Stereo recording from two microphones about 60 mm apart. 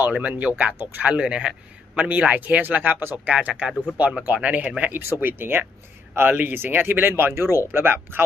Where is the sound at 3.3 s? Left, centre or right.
Right.